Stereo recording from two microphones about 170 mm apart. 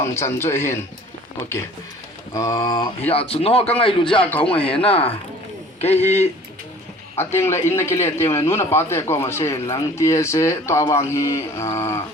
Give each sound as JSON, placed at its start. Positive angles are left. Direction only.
{"t": 0.0, "sound": "a man's voice", "side_deg": 15}
{"t": 2.3, "sound": "speech", "side_deg": 20}
{"t": 3.1, "sound": "a man's voice", "side_deg": 35}
{"t": 6.0, "sound": "a man's voice", "side_deg": 10}